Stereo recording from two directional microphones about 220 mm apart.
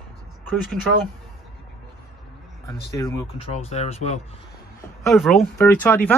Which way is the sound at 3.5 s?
30° left (ahead or behind).